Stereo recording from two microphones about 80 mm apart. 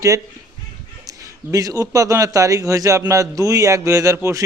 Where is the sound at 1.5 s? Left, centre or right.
Right.